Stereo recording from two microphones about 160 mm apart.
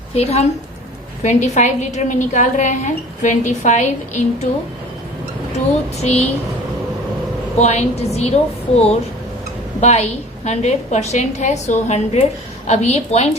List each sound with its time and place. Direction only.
0.1 s a woman's voice: 40° left (ahead or behind)
6.0 s a woman's voice: 45° left (ahead or behind)
7.6 s a woman's voice: 45° left (ahead or behind)